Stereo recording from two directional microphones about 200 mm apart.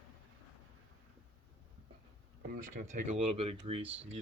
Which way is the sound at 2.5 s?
35° right (ahead or behind).